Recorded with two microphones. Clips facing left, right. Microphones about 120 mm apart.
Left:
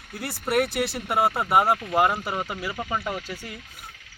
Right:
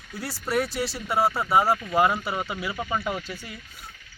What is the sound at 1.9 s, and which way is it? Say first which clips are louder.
Speech: right 1 dB; centre (ahead or behind).